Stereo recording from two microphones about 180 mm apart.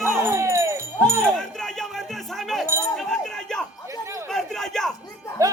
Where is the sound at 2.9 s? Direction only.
Centre (ahead or behind).